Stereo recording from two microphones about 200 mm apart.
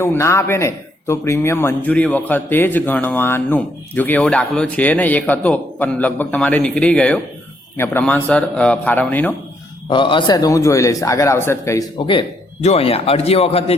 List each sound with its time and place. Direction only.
0.0 s a man's voice: 15° left (ahead or behind)
9.9 s a man's voice: 25° left (ahead or behind)